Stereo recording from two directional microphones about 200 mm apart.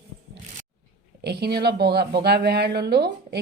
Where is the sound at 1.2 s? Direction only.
55° right (ahead or behind).